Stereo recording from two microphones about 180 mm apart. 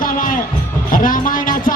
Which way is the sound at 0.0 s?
50° left (ahead or behind).